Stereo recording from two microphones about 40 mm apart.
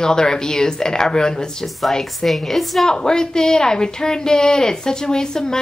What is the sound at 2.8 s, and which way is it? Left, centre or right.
A woman's voice, centre.